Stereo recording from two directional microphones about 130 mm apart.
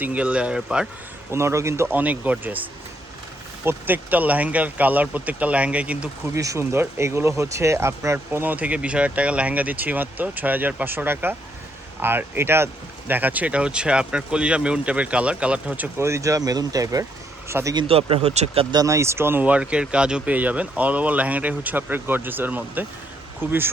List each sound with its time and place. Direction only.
0.0 s speech: 10° right (ahead or behind)
1.3 s speech: 20° right (ahead or behind)
6.3 s speech: 25° right (ahead or behind)
17.7 s speech: 45° right (ahead or behind)
18.7 s speech: 25° right (ahead or behind)